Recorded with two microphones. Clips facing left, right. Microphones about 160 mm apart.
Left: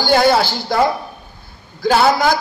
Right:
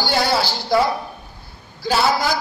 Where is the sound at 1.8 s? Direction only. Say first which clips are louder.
Left 5 dB; 55° left (ahead or behind).